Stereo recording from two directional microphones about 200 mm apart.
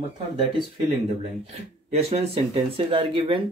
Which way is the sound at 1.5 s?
30° right (ahead or behind).